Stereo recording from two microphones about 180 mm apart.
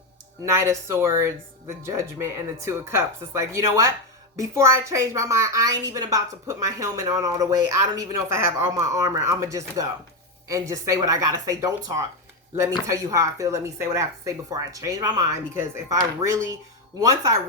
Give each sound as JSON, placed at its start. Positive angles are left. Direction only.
{"t": 0.4, "sound": "a woman's voice", "side_deg": -15}